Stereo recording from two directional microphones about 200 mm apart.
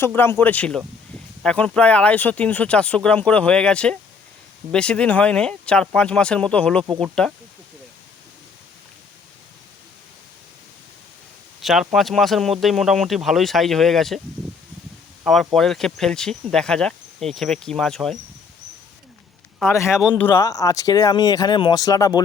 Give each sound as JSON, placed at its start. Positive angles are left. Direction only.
{"t": 0.0, "sound": "speech", "side_deg": 10}
{"t": 11.6, "sound": "speech", "side_deg": 0}
{"t": 15.2, "sound": "speech", "side_deg": 0}
{"t": 19.7, "sound": "speech", "side_deg": 15}